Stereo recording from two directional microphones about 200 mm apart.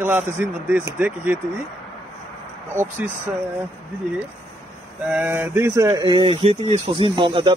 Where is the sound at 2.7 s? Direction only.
10° right (ahead or behind).